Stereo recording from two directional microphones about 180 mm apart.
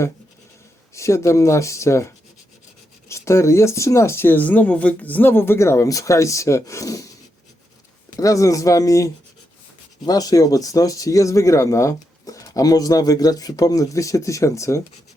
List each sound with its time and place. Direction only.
0.9 s speech: 15° left (ahead or behind)
8.1 s speech: 20° left (ahead or behind)
10.1 s speech: 20° left (ahead or behind)